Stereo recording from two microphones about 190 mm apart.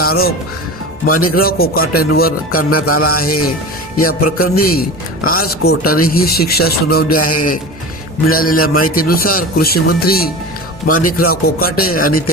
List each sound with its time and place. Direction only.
0.0 s speech: 55° left (ahead or behind)